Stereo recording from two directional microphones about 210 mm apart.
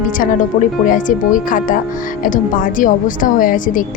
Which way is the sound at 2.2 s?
40° left (ahead or behind).